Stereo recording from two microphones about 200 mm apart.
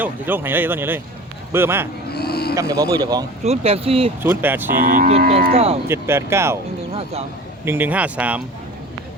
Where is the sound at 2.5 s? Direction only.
15° right (ahead or behind).